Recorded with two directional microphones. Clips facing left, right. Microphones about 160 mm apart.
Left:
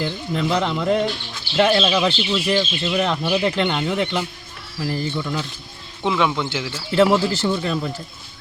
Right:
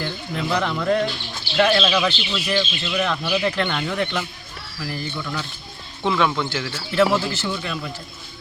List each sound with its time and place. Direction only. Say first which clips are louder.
0.0 s speech: left 4 dB; 25° left (ahead or behind)
6.0 s speech: even; 15° left (ahead or behind)
6.9 s speech: left 3 dB; 30° left (ahead or behind)